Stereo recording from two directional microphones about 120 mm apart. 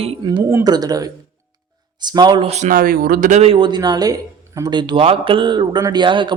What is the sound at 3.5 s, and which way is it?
Speech, 40° right (ahead or behind).